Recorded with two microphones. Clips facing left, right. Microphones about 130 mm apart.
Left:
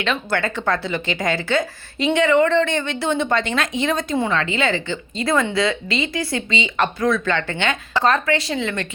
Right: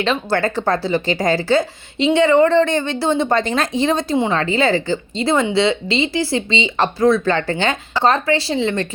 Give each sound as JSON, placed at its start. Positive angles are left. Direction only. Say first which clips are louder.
{"t": 0.0, "sound": "speech", "louder": "right 4 dB", "side_deg": -35}